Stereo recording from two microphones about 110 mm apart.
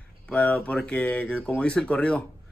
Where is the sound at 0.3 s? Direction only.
15° left (ahead or behind).